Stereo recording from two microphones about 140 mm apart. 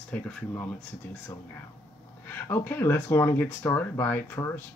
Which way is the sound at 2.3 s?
15° left (ahead or behind).